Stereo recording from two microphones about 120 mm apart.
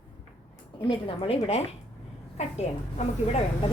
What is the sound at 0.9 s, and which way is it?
Speech, 50° left (ahead or behind).